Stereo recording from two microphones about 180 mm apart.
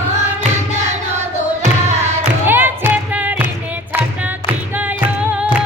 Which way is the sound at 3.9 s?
10° right (ahead or behind).